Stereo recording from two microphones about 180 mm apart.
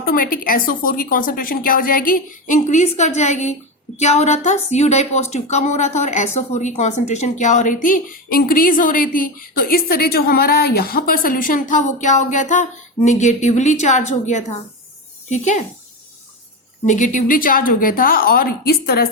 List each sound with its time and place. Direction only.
0.0 s a woman's voice: 50° left (ahead or behind)
16.8 s a woman's voice: 45° left (ahead or behind); by 19.0 s 60° left (ahead or behind)